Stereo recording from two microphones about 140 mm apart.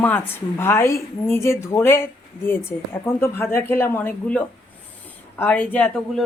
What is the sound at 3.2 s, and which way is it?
Speech, 20° left (ahead or behind).